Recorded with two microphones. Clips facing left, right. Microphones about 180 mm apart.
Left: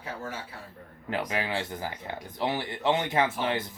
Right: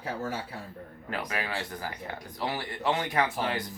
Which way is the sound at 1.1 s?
20° left (ahead or behind).